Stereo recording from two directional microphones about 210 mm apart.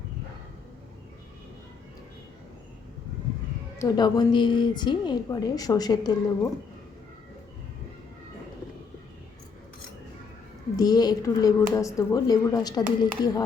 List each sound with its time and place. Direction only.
3.8 s a woman's voice: 20° left (ahead or behind)
10.8 s speech: 20° left (ahead or behind)